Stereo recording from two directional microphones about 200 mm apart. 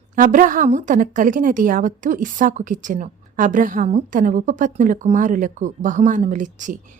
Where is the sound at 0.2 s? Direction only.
40° right (ahead or behind).